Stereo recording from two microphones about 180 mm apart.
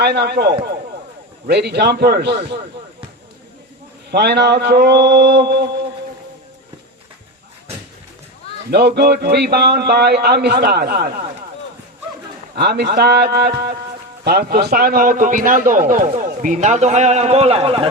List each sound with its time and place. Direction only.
0.0 s a man's voice: 65° right (ahead or behind)
4.1 s a man's voice: 65° right (ahead or behind)
8.7 s a man's voice: 65° right (ahead or behind)
12.5 s a man's voice: 65° right (ahead or behind); by 17.8 s 30° right (ahead or behind)